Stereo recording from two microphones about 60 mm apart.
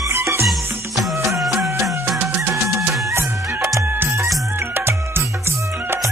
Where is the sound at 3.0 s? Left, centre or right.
Right.